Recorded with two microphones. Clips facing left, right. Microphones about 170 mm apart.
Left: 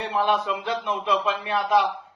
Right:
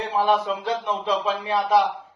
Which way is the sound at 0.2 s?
35° right (ahead or behind).